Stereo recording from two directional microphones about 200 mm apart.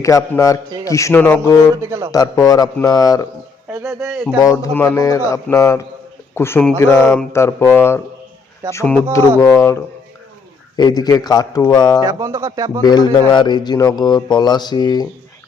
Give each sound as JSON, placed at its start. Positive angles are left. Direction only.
{"t": 0.0, "sound": "speech", "side_deg": 15}
{"t": 1.8, "sound": "speech", "side_deg": -15}
{"t": 2.1, "sound": "speech", "side_deg": 15}
{"t": 3.7, "sound": "speech", "side_deg": -5}
{"t": 4.4, "sound": "speech", "side_deg": 15}
{"t": 10.8, "sound": "speech", "side_deg": 20}
{"t": 12.0, "sound": "speech", "side_deg": -15}
{"t": 12.8, "sound": "speech", "side_deg": 20}